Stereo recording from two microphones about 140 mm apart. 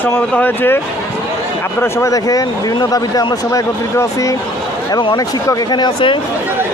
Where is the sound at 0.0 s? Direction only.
15° left (ahead or behind).